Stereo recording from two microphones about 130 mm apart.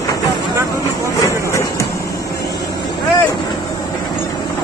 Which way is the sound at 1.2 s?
25° left (ahead or behind).